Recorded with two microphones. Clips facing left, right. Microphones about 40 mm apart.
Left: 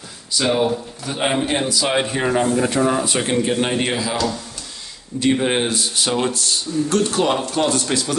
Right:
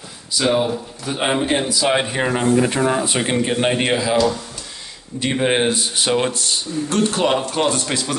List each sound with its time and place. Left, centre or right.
0.3 s a man's voice: centre